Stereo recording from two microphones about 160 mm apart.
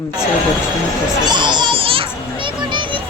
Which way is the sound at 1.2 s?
30° right (ahead or behind).